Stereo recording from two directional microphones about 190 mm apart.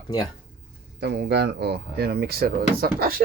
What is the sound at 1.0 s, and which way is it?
Speech, 60° right (ahead or behind).